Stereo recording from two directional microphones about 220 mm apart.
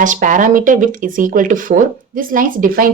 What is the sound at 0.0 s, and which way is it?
Speech, 35° right (ahead or behind).